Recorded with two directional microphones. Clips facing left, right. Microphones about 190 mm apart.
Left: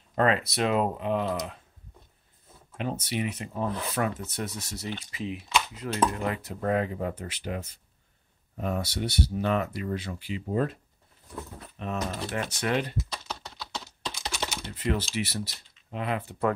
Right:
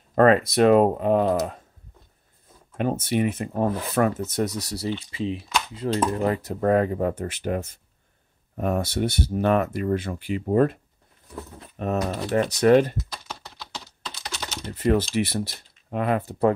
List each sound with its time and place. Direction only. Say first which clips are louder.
0.1 s speech: right 8 dB; 50° right (ahead or behind)
2.8 s speech: right 7 dB; 50° right (ahead or behind)
13.1 s typing: even; centre (ahead or behind)
14.7 s speech: right 9 dB; 45° right (ahead or behind)
15.1 s speech: right 7 dB; 55° right (ahead or behind); by 16.5 s 35° right (ahead or behind)